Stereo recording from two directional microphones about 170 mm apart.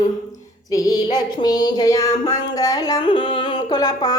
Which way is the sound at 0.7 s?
20° left (ahead or behind).